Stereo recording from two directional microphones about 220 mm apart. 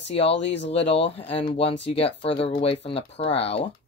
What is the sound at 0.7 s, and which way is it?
Speech, 25° left (ahead or behind).